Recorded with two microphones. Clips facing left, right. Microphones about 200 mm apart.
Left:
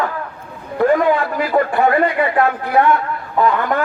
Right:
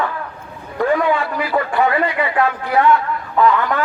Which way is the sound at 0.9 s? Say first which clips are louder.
Even; 45° left (ahead or behind).